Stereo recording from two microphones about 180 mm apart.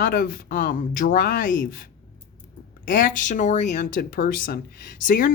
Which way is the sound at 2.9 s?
50° left (ahead or behind).